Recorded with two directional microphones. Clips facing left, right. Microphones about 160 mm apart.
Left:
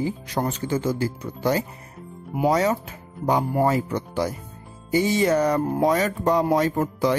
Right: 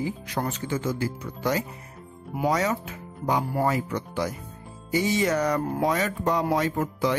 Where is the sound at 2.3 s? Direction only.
30° left (ahead or behind).